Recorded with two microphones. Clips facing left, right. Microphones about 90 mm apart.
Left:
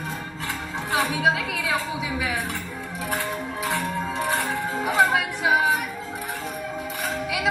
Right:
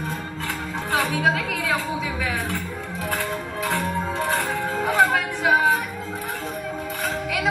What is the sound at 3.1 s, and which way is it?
Music, 20° left (ahead or behind).